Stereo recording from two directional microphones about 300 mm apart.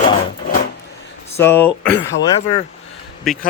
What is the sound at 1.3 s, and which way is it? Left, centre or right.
Speech, centre.